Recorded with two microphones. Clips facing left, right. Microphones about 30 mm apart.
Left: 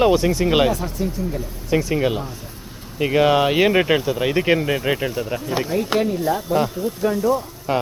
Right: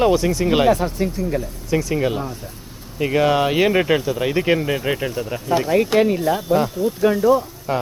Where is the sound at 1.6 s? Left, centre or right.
Centre.